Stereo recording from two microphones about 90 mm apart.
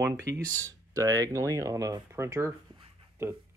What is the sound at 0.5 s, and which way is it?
Speech, 20° left (ahead or behind).